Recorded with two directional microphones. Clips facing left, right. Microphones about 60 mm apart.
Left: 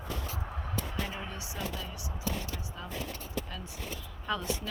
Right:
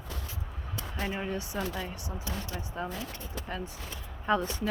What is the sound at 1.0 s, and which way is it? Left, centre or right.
A woman's voice, right.